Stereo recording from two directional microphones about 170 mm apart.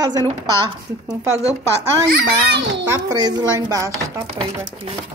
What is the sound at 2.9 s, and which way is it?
A woman's voice, 20° right (ahead or behind).